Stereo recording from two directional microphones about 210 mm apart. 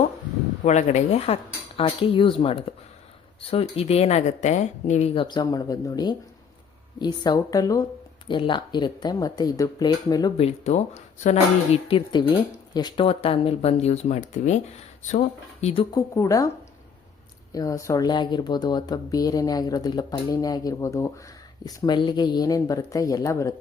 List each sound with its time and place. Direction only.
0.6 s speech: 35° left (ahead or behind)
15.6 s speech: 25° left (ahead or behind)
17.5 s speech: 15° left (ahead or behind)